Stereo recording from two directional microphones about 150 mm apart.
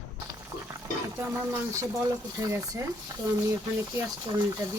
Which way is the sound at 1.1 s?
15° right (ahead or behind).